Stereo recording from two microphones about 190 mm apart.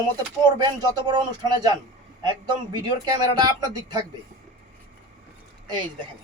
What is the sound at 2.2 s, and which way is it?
Speech, 20° right (ahead or behind).